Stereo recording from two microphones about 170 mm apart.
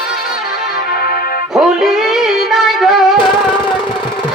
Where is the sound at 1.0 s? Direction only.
65° left (ahead or behind).